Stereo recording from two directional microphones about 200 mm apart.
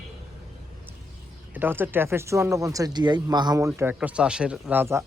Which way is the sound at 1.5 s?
10° right (ahead or behind).